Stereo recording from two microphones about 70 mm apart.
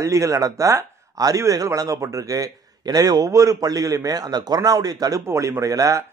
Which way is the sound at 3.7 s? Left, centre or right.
Right.